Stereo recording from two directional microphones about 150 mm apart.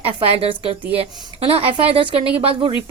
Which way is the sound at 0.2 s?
40° right (ahead or behind).